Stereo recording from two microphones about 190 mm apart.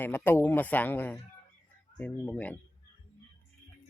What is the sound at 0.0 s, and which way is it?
Speech, 10° left (ahead or behind).